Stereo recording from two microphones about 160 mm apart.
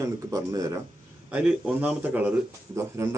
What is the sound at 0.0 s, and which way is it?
Speech, 20° right (ahead or behind).